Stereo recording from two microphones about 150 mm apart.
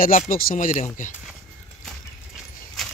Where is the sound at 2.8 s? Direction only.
Centre (ahead or behind).